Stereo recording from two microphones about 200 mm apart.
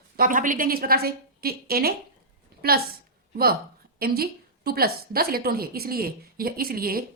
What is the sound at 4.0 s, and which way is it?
A woman's voice, 50° right (ahead or behind).